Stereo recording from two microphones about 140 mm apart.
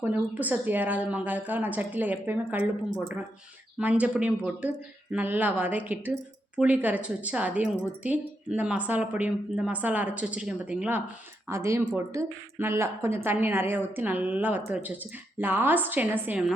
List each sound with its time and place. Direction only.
0.0 s a woman's voice: 10° right (ahead or behind)
3.8 s a woman's voice: 10° right (ahead or behind)